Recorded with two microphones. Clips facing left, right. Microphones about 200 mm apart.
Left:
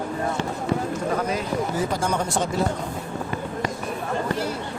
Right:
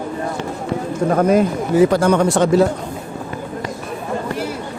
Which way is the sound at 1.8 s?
70° right (ahead or behind).